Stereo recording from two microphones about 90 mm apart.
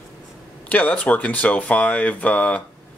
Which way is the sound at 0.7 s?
15° left (ahead or behind).